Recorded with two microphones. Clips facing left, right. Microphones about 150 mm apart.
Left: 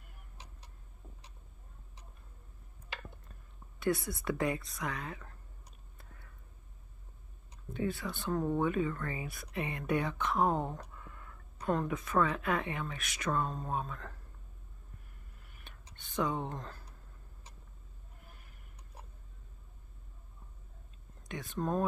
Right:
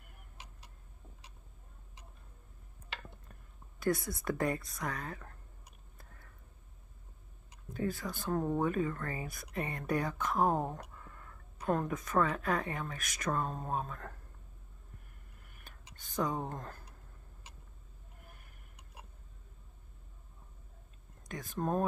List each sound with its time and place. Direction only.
4.2 s speech: 45° right (ahead or behind)
7.7 s speech: 40° right (ahead or behind)
15.5 s a sound: 40° right (ahead or behind)
21.3 s speech: 40° right (ahead or behind)